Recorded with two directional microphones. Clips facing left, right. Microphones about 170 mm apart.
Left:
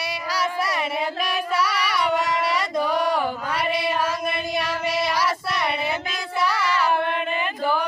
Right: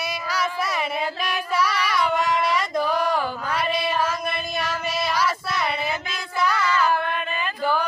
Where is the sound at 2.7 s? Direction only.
15° left (ahead or behind).